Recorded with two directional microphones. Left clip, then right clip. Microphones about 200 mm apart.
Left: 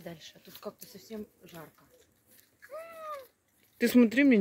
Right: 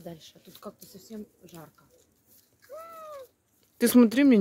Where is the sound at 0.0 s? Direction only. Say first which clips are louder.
Right 1 dB; 60° right (ahead or behind).